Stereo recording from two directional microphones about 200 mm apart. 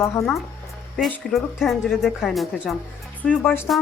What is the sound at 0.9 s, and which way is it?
A woman's voice, centre (ahead or behind).